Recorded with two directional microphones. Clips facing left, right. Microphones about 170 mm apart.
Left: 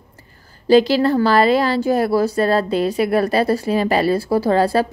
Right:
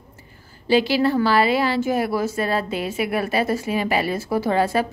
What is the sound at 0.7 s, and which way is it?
A woman's voice, 40° left (ahead or behind).